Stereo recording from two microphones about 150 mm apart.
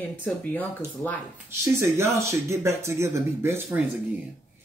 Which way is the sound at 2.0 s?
20° right (ahead or behind).